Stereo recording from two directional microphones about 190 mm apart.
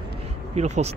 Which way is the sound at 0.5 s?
35° right (ahead or behind).